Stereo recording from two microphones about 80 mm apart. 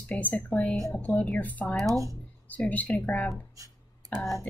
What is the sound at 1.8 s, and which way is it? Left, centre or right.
Speech, right.